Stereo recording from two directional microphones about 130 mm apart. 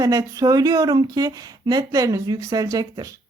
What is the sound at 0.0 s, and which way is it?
Speech, 25° right (ahead or behind).